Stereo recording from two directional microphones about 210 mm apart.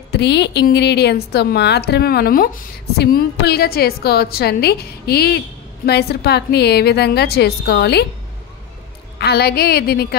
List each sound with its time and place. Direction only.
0.1 s a woman's voice: 55° left (ahead or behind)
9.2 s a woman's voice: 50° left (ahead or behind)